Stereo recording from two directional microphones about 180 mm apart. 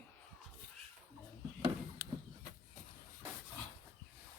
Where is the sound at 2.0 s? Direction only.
15° right (ahead or behind).